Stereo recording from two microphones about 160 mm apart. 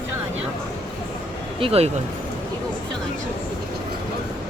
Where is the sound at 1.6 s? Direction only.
40° right (ahead or behind).